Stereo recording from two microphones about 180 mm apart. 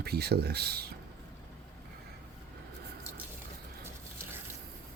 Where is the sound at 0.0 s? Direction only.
60° right (ahead or behind).